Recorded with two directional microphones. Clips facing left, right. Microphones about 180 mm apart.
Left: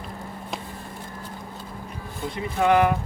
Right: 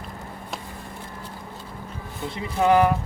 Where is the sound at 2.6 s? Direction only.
35° right (ahead or behind).